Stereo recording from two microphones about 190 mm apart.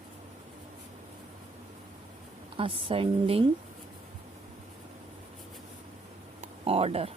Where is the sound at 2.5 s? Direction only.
30° right (ahead or behind).